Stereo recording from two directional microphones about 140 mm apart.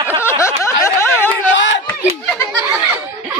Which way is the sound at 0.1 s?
20° left (ahead or behind).